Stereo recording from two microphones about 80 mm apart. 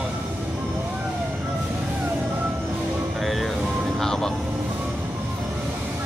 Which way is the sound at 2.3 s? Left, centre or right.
Right.